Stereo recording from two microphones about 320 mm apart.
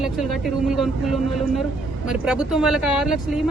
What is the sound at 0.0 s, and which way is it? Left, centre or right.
Speech, centre.